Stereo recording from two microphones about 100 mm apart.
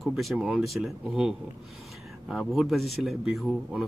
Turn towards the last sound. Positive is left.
turn(degrees=0)  # may be behind; listen again after turning